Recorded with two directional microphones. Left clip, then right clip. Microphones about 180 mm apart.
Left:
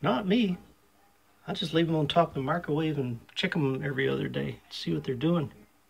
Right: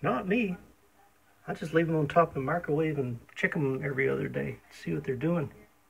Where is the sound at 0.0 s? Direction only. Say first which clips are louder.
Left 2 dB; 30° left (ahead or behind).